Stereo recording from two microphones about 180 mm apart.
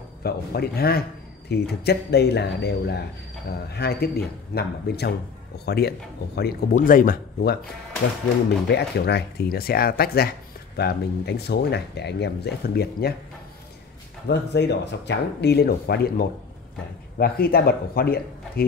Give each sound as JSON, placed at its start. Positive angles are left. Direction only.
{"t": 0.2, "sound": "speech", "side_deg": 60}
{"t": 6.7, "sound": "speech", "side_deg": 50}
{"t": 8.6, "sound": "speech", "side_deg": 65}
{"t": 14.2, "sound": "speech", "side_deg": 70}